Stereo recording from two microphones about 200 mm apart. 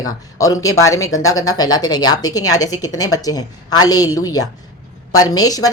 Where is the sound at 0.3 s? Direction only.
15° left (ahead or behind).